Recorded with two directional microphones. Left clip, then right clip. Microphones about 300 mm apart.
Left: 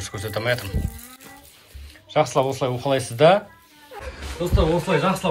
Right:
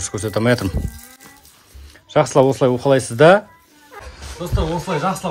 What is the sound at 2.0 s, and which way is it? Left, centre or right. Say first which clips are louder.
Speech: right 6 dB; right.